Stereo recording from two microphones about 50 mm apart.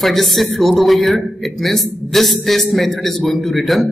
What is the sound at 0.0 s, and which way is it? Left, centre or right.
A man's voice, centre.